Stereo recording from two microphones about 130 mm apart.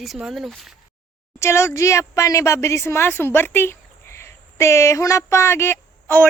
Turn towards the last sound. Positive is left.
turn(degrees=15)  # may be behind; listen again after turning